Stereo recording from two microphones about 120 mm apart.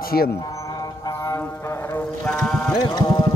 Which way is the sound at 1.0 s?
25° left (ahead or behind).